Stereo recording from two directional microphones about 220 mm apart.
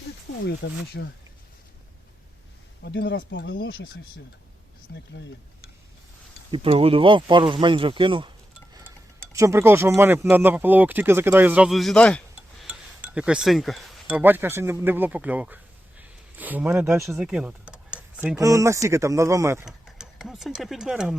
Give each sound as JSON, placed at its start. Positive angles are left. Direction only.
{"t": 0.3, "sound": "speech", "side_deg": 55}
{"t": 2.8, "sound": "speech", "side_deg": 50}
{"t": 3.5, "sound": "speech", "side_deg": 45}
{"t": 6.5, "sound": "speech", "side_deg": -25}
{"t": 9.3, "sound": "speech", "side_deg": -15}
{"t": 17.1, "sound": "computer keyboard", "side_deg": -5}
{"t": 18.3, "sound": "speech", "side_deg": -15}
{"t": 19.6, "sound": "speech", "side_deg": 0}